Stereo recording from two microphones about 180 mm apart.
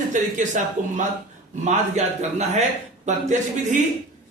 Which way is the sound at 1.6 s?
40° right (ahead or behind).